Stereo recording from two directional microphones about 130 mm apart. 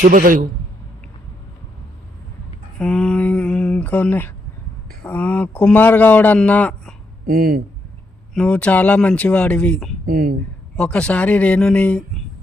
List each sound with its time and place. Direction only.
0.0 s a man's voice: 90° right
2.7 s a man's voice: 5° left (ahead or behind)
8.3 s a man's voice: 10° left (ahead or behind)